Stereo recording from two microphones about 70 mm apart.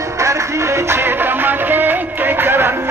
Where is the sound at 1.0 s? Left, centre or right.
Right.